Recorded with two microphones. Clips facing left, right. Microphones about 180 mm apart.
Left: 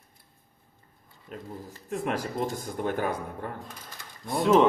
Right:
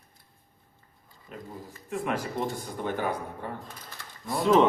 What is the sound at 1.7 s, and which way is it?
Speech, 40° left (ahead or behind).